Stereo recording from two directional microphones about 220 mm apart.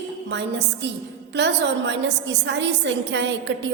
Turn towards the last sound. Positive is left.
turn(degrees=-55)  # may be behind; listen again after turning